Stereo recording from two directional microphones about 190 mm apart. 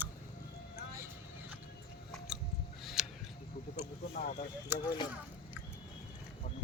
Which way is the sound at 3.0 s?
Centre (ahead or behind).